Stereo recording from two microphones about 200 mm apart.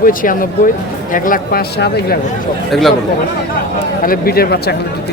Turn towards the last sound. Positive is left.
turn(degrees=50)  # may be behind; listen again after turning